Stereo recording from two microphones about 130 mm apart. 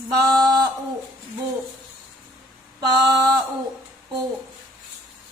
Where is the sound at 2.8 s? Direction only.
30° right (ahead or behind).